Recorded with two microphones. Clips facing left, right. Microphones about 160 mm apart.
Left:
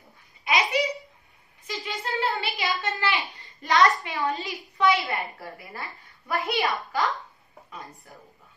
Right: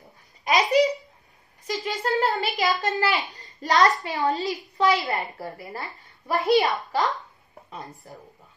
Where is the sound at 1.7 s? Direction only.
40° right (ahead or behind).